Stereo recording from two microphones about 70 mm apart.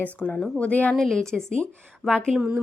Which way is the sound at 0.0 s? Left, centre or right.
Centre.